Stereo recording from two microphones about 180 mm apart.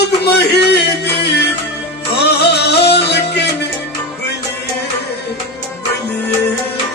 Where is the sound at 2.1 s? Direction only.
65° left (ahead or behind).